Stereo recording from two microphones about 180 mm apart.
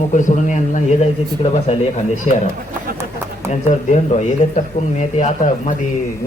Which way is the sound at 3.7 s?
40° left (ahead or behind).